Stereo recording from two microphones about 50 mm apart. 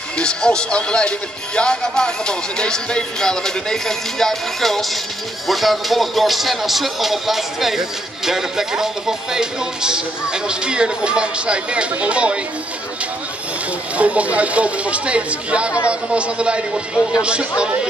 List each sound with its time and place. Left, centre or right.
0.2 s speech: centre
5.5 s music: centre
8.3 s speech: centre
13.9 s a man's voice: right